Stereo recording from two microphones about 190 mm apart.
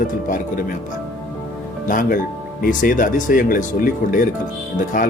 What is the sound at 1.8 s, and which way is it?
A man's voice, 45° left (ahead or behind).